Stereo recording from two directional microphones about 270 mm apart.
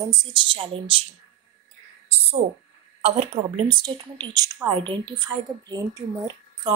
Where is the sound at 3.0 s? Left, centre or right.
Right.